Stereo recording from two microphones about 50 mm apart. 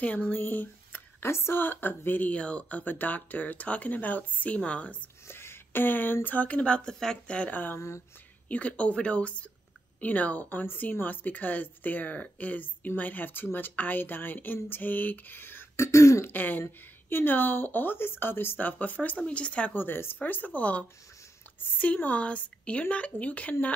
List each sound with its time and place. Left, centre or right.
0.0 s speech: left
1.2 s a woman's voice: left
2.3 s speech: left
5.3 s speech: left
6.6 s speech: left
6.9 s speech: centre
7.2 s speech: left
7.5 s speech: left
8.5 s speech: left
15.7 s throat clearing: left
16.3 s speech: left
19.7 s speech: left